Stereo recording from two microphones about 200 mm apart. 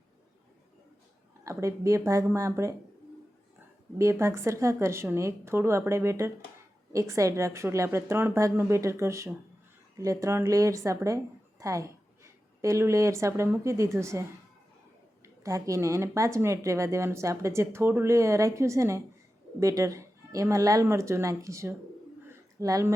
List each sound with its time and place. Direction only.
1.5 s speech: 15° right (ahead or behind)
3.9 s a woman's voice: 15° right (ahead or behind)
15.4 s speech: 15° right (ahead or behind)
22.3 s a sound: 15° right (ahead or behind)